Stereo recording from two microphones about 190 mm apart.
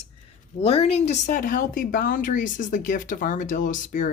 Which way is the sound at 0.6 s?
30° left (ahead or behind).